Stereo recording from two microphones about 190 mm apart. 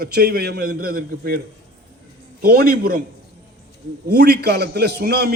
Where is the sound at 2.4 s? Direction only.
55° right (ahead or behind).